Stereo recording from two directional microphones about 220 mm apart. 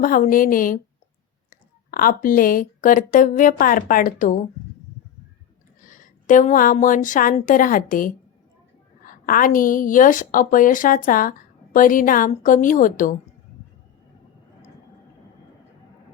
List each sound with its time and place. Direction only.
0.0 s a woman's voice: 40° left (ahead or behind)
5.8 s a woman's voice: 35° left (ahead or behind)